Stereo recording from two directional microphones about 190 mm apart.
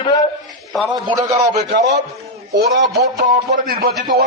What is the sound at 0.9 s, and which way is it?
Speech, 20° right (ahead or behind).